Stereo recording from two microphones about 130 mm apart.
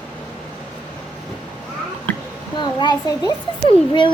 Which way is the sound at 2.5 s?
35° left (ahead or behind).